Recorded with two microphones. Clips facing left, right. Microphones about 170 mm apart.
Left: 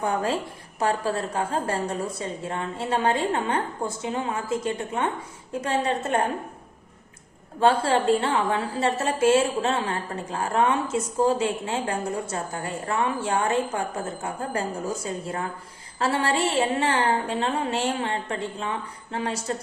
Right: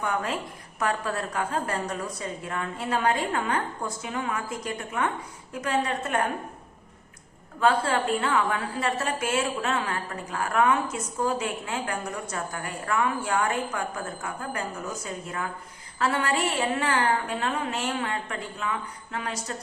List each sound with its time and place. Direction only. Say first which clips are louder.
0.0 s a woman's voice: left 4 dB; 30° left (ahead or behind)
7.6 s a woman's voice: left 3 dB; 30° left (ahead or behind)